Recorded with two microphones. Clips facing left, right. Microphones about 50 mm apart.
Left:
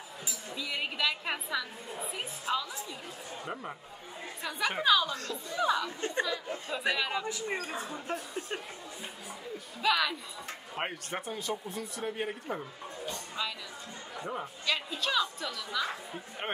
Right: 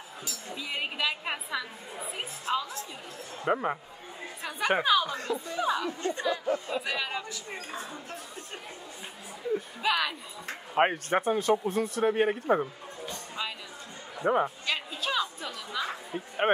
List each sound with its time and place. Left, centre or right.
0.6 s a woman's voice: right
3.4 s speech: right
4.4 s a woman's voice: centre
5.9 s speech: left
6.2 s a woman's voice: centre
7.0 s speech: centre
7.2 s speech: left
9.8 s speech: centre
10.7 s speech: right
11.5 s speech: right
13.4 s speech: centre
14.2 s speech: right
14.7 s a woman's voice: centre